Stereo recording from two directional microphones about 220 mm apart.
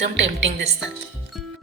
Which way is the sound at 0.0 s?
55° right (ahead or behind).